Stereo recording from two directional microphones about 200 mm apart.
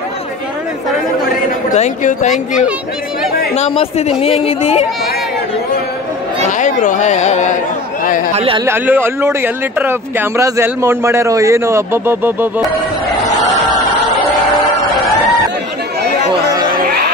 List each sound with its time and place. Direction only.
1.8 s speech: 35° left (ahead or behind)
2.3 s speech: 5° right (ahead or behind)
3.5 s speech: 35° left (ahead or behind)
6.6 s speech: 40° left (ahead or behind)
8.4 s speech: 25° right (ahead or behind)
8.6 s speech: 10° right (ahead or behind)
16.7 s music: 45° right (ahead or behind)